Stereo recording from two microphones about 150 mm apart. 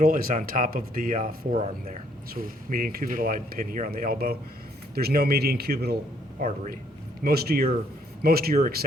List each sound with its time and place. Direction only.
0.0 s speech: 70° right (ahead or behind)
1.5 s speech: 45° right (ahead or behind)
2.3 s speech: 70° right (ahead or behind)
4.9 s a man's voice: 90° right
6.4 s a man's voice: 80° right
7.3 s a man's voice: 90° right